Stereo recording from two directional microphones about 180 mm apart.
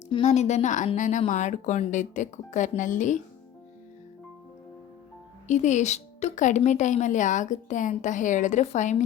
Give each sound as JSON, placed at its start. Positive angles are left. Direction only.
{"t": 0.1, "sound": "a woman's voice", "side_deg": 40}
{"t": 5.5, "sound": "speech", "side_deg": 40}